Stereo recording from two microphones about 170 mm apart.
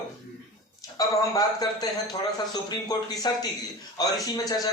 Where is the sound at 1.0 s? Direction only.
20° left (ahead or behind).